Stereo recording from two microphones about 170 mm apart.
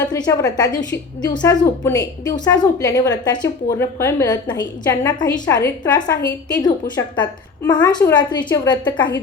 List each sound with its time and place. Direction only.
0.1 s a woman's voice: 20° left (ahead or behind)